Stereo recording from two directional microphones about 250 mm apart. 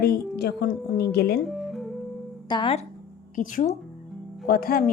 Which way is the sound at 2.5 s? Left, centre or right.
Centre.